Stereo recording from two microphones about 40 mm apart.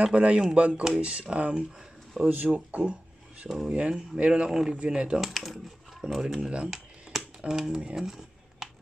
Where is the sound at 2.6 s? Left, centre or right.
Right.